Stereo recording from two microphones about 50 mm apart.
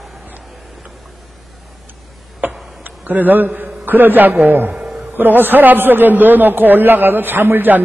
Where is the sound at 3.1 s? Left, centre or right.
Right.